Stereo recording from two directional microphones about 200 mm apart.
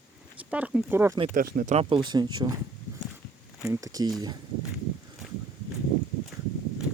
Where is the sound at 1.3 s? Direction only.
45° right (ahead or behind).